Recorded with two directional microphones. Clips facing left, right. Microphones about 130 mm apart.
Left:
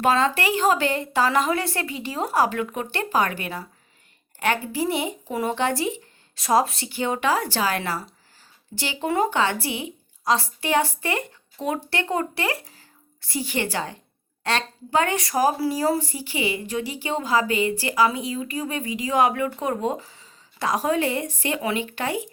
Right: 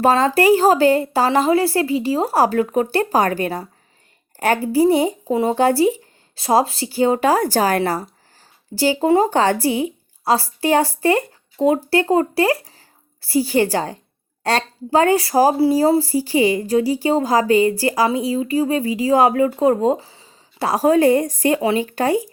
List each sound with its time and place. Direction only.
0.0 s speech: 35° right (ahead or behind)